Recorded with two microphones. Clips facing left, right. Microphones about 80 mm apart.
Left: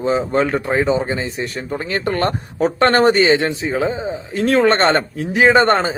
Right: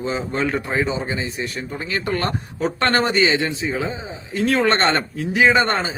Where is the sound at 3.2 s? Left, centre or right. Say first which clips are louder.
Left 4 dB; left.